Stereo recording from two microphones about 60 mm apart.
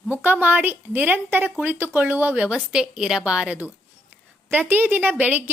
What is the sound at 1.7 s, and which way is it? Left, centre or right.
Speech, right.